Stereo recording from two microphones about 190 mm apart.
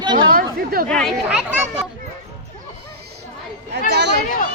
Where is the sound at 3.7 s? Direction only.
60° right (ahead or behind).